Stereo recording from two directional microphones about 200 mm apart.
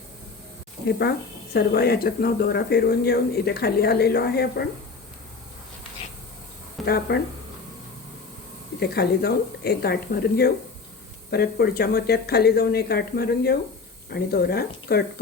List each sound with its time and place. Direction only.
1.5 s speech: 50° left (ahead or behind)
6.8 s speech: 55° left (ahead or behind)
8.8 s speech: 50° left (ahead or behind)